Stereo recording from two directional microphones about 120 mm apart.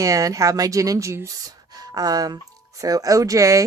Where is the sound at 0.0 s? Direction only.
30° right (ahead or behind).